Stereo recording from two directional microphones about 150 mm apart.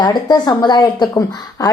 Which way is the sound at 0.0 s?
30° left (ahead or behind).